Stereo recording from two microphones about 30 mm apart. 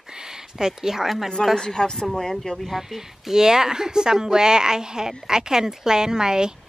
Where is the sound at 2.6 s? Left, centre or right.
Centre.